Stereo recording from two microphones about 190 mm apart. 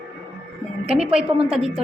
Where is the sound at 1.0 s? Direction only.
5° right (ahead or behind).